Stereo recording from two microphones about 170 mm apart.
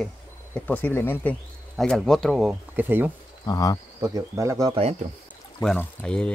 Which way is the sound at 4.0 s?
20° right (ahead or behind).